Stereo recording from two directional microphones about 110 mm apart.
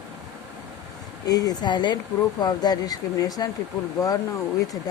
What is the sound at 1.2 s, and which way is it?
Speech, 35° left (ahead or behind).